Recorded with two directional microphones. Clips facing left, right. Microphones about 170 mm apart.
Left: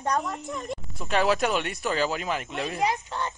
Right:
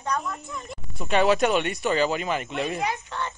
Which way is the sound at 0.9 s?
Centre (ahead or behind).